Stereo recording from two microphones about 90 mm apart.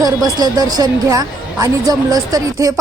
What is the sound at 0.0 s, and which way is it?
A woman's voice, 45° right (ahead or behind).